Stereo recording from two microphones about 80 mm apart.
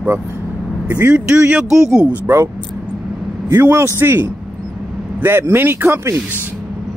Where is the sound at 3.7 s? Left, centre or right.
Right.